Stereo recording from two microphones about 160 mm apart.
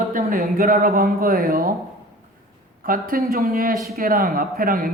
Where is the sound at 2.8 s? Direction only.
60° right (ahead or behind).